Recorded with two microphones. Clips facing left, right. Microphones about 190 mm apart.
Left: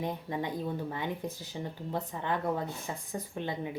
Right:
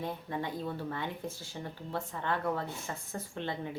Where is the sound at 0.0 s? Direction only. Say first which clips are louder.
Left 2 dB; 15° left (ahead or behind).